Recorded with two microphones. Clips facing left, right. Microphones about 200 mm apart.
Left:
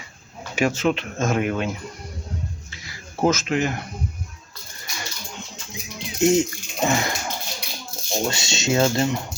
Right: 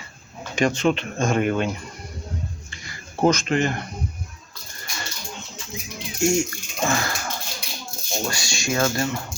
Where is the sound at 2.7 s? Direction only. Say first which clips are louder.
Even; centre (ahead or behind).